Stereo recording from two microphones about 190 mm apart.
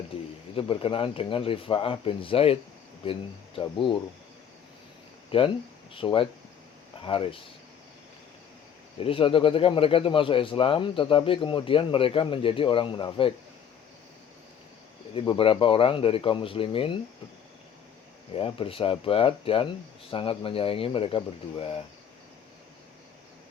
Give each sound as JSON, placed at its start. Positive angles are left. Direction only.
{"t": 0.5, "sound": "speech", "side_deg": 30}
{"t": 5.3, "sound": "speech", "side_deg": 30}
{"t": 9.0, "sound": "speech", "side_deg": 30}
{"t": 15.1, "sound": "speech", "side_deg": 30}
{"t": 18.3, "sound": "speech", "side_deg": 30}